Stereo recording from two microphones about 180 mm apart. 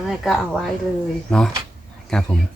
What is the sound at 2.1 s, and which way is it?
Speech, 5° left (ahead or behind).